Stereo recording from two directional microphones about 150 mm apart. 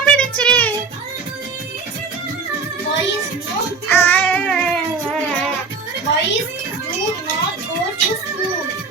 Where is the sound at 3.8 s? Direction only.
15° left (ahead or behind).